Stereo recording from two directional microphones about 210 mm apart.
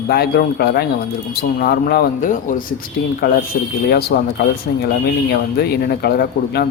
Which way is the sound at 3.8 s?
45° left (ahead or behind).